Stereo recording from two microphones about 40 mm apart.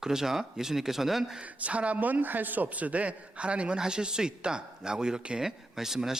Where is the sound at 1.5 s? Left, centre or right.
Right.